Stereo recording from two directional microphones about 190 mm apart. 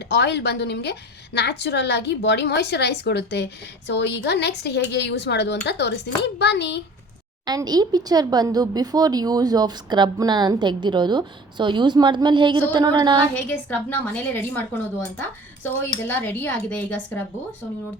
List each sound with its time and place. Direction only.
0.1 s a woman's voice: 65° left (ahead or behind)
7.4 s speech: 20° right (ahead or behind)
13.3 s a woman's voice: 10° left (ahead or behind)